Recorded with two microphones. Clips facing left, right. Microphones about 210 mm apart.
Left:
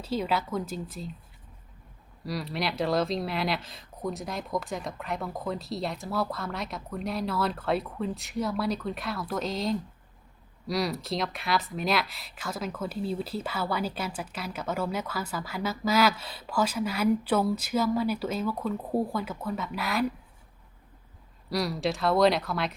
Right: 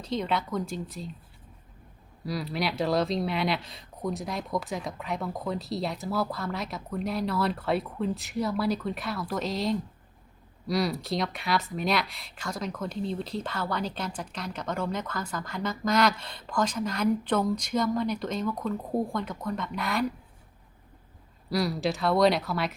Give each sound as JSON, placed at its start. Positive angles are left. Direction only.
{"t": 0.0, "sound": "speech", "side_deg": 5}
{"t": 2.2, "sound": "speech", "side_deg": 0}
{"t": 21.5, "sound": "speech", "side_deg": 0}